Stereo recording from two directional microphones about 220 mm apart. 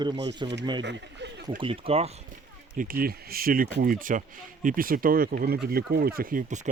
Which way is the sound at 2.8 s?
40° right (ahead or behind).